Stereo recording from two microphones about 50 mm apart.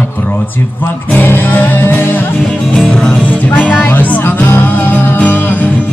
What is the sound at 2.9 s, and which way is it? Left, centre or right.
Music, left.